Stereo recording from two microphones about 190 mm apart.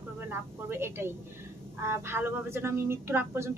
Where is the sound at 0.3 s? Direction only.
10° right (ahead or behind).